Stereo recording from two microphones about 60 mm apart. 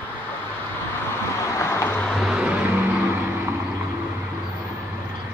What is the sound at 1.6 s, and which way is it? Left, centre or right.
Vehicle, left.